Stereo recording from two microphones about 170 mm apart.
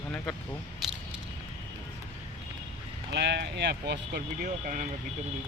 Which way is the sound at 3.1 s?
80° right.